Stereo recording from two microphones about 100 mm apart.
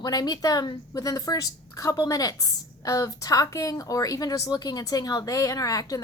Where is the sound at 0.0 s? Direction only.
40° left (ahead or behind).